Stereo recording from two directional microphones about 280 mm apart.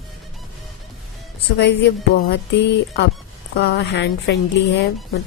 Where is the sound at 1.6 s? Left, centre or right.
Left.